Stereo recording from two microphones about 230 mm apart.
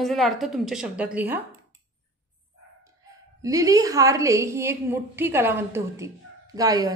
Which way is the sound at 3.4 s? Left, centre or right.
Centre.